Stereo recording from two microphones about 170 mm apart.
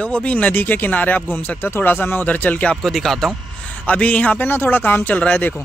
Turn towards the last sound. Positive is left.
turn(degrees=10)  # may be behind; listen again after turning